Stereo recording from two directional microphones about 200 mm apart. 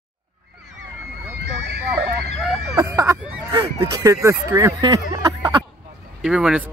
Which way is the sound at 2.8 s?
15° right (ahead or behind).